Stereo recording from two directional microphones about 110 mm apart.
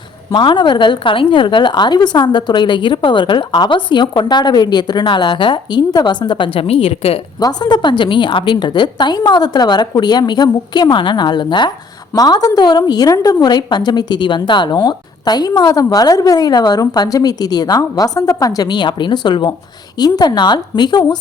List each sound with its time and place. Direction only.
0.3 s a woman's voice: 45° left (ahead or behind)
7.3 s a woman's voice: 40° left (ahead or behind)